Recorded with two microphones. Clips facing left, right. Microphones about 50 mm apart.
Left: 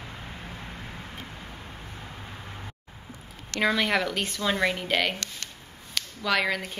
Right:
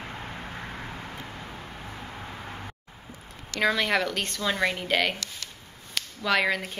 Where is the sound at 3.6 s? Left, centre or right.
Centre.